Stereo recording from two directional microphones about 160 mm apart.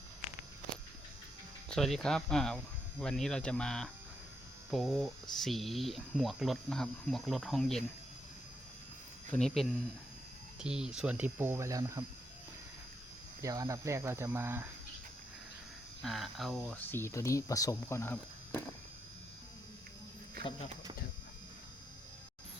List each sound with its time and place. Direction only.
1.7 s speech: 5° left (ahead or behind)
9.3 s speech: centre (ahead or behind); by 12.0 s 20° right (ahead or behind)
13.4 s speech: 20° right (ahead or behind)
16.0 s speech: centre (ahead or behind)